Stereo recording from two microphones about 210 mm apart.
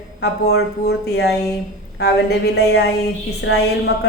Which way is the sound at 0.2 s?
50° left (ahead or behind).